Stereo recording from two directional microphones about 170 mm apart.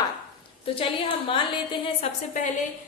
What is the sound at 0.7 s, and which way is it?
A woman's voice, 30° left (ahead or behind).